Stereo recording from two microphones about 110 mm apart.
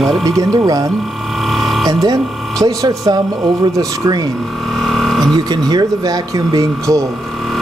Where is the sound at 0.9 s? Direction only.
Centre (ahead or behind).